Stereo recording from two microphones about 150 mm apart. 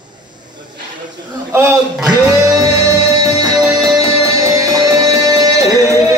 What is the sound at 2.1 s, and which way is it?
Music, 25° right (ahead or behind).